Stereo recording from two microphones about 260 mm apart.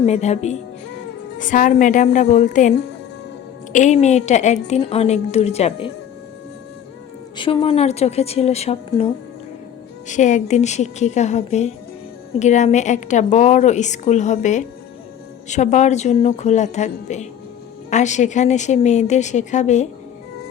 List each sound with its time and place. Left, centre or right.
0.0 s a woman's voice: left
7.3 s a woman's voice: centre